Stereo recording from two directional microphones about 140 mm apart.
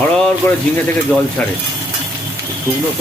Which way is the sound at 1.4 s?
10° left (ahead or behind).